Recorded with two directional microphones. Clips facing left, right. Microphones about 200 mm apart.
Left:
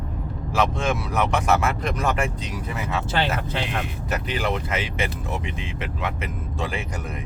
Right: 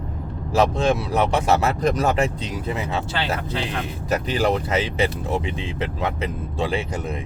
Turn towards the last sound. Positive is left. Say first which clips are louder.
# right 5 dB
turn(degrees=-30)  # may be behind; listen again after turning